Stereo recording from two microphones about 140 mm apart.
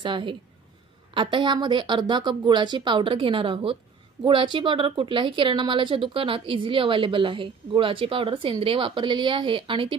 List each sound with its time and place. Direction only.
0.0 s speech: 35° right (ahead or behind)